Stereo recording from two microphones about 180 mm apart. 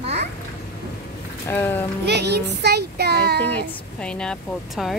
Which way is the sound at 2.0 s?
70° right (ahead or behind).